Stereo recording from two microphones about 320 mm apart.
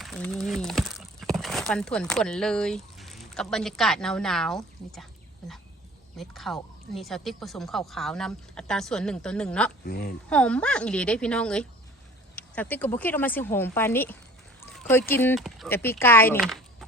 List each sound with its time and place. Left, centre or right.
0.0 s speech: centre
6.1 s speech: centre
9.8 s speech: left
10.2 s speech: centre